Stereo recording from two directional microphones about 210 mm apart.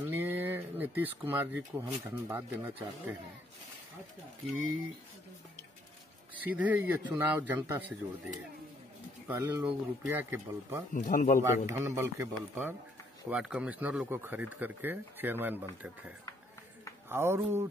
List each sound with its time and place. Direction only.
0.0 s speech: 10° right (ahead or behind)
6.4 s speech: 5° right (ahead or behind)
9.3 s speech: 10° right (ahead or behind)
11.0 s a man's voice: 40° left (ahead or behind)
11.4 s speech: 10° right (ahead or behind)
17.1 s speech: 10° right (ahead or behind)